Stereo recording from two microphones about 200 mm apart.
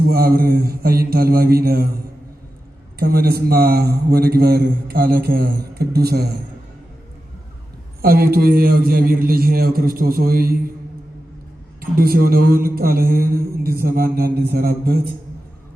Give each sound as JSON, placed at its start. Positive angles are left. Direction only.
{"t": 0.1, "sound": "a man's voice", "side_deg": -50}
{"t": 3.0, "sound": "a man's voice", "side_deg": -50}
{"t": 8.0, "sound": "a man's voice", "side_deg": -50}
{"t": 11.8, "sound": "a man's voice", "side_deg": -45}